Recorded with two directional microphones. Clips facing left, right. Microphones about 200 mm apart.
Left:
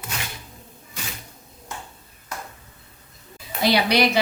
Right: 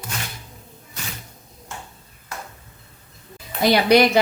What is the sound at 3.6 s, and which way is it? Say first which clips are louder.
Speech: right 4 dB; 50° right (ahead or behind).